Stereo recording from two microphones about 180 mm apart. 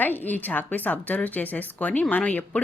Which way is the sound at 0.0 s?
10° left (ahead or behind).